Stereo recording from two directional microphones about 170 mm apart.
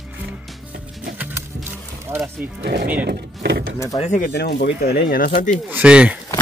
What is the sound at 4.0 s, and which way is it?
Speech, 45° left (ahead or behind).